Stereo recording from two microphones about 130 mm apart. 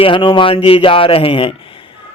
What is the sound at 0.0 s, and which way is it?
A man's voice, 40° left (ahead or behind).